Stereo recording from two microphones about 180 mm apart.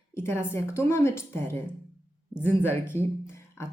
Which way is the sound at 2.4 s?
10° left (ahead or behind).